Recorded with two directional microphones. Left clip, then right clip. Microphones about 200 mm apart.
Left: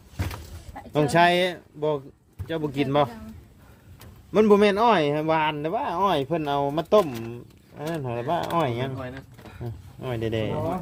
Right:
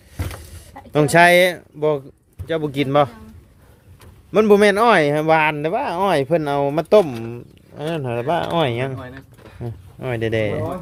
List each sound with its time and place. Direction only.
0.9 s speech: 35° right (ahead or behind)
4.3 s speech: 25° right (ahead or behind)